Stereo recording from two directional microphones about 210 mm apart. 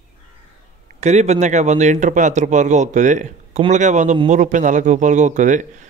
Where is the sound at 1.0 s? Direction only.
30° right (ahead or behind).